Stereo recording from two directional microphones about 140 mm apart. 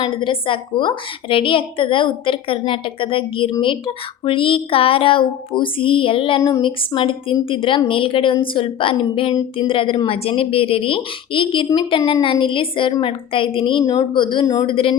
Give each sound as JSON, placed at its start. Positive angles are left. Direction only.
{"t": 0.0, "sound": "speech", "side_deg": 35}
{"t": 14.7, "sound": "speech", "side_deg": 40}